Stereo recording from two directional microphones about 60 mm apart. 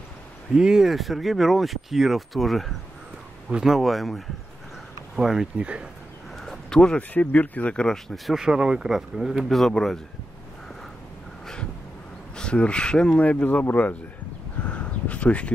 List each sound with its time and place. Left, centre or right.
0.6 s speech: centre
5.6 s speech: centre
6.3 s a sound: centre
7.0 s speech: left; by 8.4 s centre
8.4 s speech: centre
12.4 s speech: centre
13.2 s speech: left
14.7 s a sound: left